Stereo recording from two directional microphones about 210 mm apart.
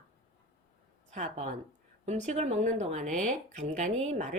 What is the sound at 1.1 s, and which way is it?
Speech, 35° right (ahead or behind).